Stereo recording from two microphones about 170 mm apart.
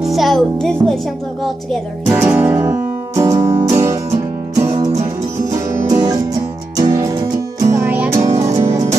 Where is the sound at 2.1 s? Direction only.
10° right (ahead or behind).